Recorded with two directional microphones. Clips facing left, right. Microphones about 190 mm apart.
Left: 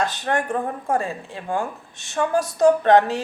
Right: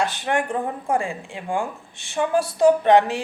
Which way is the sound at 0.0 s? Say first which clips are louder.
Even; 15° right (ahead or behind).